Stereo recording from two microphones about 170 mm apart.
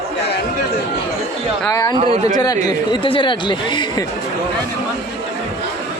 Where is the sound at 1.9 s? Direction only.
30° right (ahead or behind).